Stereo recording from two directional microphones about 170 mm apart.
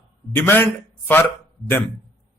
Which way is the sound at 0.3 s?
10° left (ahead or behind).